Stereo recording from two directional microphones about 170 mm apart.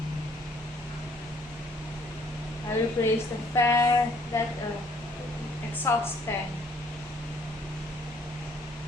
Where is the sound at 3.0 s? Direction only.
20° left (ahead or behind).